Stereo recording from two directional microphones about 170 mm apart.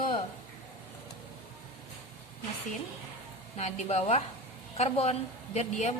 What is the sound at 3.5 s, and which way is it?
A woman's voice, 40° left (ahead or behind).